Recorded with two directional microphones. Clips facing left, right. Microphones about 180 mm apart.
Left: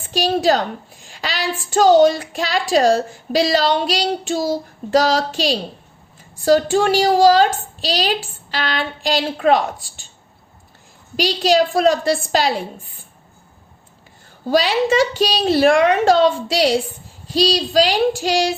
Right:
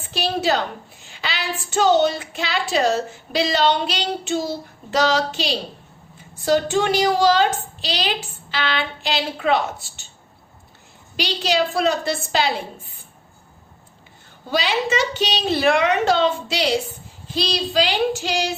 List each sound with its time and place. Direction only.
0.1 s a woman's voice: 40° left (ahead or behind)
11.2 s a woman's voice: 40° left (ahead or behind)
14.5 s a woman's voice: 45° left (ahead or behind)